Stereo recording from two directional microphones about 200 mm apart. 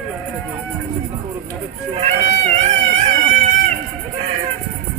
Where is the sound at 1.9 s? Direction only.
35° right (ahead or behind).